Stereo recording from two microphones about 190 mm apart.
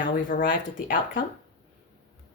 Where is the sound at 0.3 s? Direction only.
45° left (ahead or behind).